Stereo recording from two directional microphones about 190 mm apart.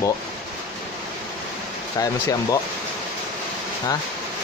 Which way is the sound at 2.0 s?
20° left (ahead or behind).